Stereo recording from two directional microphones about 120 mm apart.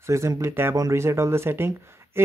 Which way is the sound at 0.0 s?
25° right (ahead or behind).